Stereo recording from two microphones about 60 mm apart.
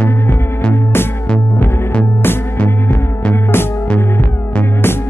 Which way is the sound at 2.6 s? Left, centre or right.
Left.